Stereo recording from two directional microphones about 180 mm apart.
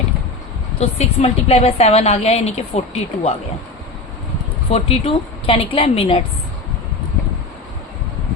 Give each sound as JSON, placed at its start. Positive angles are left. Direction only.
{"t": 0.8, "sound": "a woman's voice", "side_deg": 35}
{"t": 4.7, "sound": "a woman's voice", "side_deg": 35}